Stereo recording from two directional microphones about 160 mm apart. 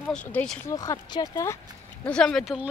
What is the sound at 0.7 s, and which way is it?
Speech, 20° left (ahead or behind).